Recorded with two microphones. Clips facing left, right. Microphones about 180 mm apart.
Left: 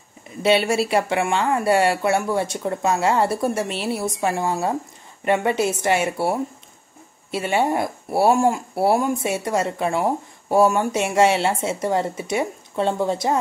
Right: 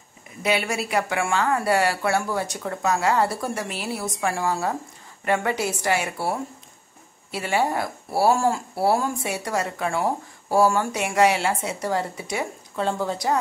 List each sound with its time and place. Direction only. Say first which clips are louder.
0.4 s speech: left 6 dB; 30° left (ahead or behind)